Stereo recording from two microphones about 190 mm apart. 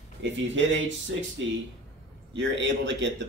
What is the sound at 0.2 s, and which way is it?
Speech, 75° right (ahead or behind).